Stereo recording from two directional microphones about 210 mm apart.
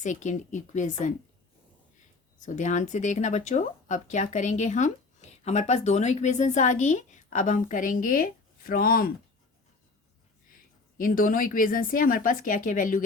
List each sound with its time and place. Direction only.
0.0 s speech: 35° left (ahead or behind)
2.4 s speech: 35° left (ahead or behind)
10.9 s speech: 40° left (ahead or behind)